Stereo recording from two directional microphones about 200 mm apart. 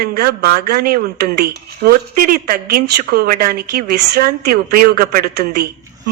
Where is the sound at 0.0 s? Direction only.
50° right (ahead or behind).